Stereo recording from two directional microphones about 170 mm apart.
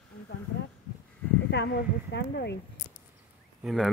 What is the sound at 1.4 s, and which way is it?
A woman's voice, 85° left.